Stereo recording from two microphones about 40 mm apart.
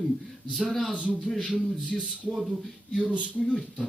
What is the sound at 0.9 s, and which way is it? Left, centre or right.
Speech, right.